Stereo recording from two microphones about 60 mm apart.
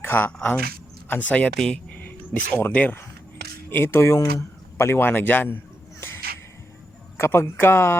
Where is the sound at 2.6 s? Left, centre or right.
Left.